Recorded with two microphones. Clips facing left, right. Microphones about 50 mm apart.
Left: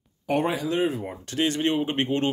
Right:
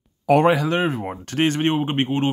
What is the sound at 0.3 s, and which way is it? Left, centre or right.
Speech, right.